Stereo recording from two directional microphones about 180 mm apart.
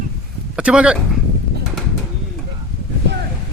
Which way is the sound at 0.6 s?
5° right (ahead or behind).